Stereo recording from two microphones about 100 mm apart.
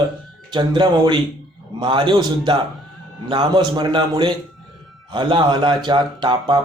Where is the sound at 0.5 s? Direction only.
50° right (ahead or behind).